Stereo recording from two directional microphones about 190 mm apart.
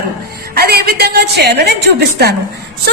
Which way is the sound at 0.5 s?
55° right (ahead or behind).